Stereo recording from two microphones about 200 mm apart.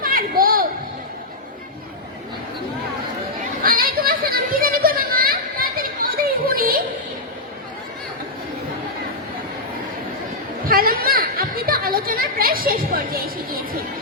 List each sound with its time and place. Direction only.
0.0 s children playing: 45° right (ahead or behind)
3.6 s children playing: 45° right (ahead or behind)
10.7 s a sound: 45° right (ahead or behind)